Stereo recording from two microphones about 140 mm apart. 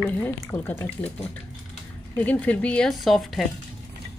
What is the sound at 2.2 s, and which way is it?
Speech, 10° left (ahead or behind).